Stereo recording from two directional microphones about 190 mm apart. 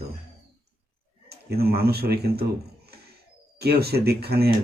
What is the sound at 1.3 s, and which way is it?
Speech, 55° right (ahead or behind).